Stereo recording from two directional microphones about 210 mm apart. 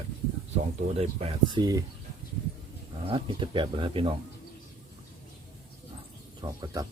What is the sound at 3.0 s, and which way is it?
Speech, 25° right (ahead or behind).